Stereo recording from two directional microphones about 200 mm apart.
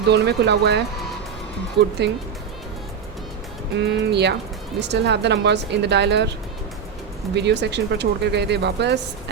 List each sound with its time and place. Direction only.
0.1 s speech: 55° right (ahead or behind)
3.8 s speech: 60° right (ahead or behind)
7.3 s speech: 60° right (ahead or behind)